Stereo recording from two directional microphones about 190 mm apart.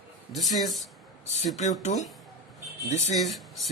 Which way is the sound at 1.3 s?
35° left (ahead or behind).